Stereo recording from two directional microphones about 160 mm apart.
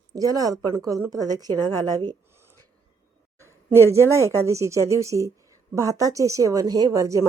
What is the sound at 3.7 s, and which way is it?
A woman's voice, 15° right (ahead or behind).